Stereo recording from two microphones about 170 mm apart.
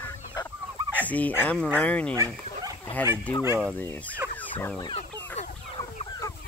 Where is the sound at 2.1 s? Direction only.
20° right (ahead or behind).